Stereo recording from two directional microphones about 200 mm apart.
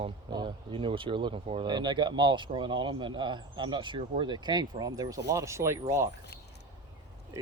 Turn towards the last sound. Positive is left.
turn(degrees=-15)  # may be behind; listen again after turning